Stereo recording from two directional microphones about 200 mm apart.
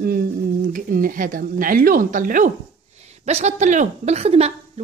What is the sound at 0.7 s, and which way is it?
A woman's voice, 45° right (ahead or behind).